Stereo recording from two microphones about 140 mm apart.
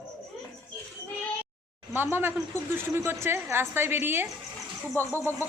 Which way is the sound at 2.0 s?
15° right (ahead or behind).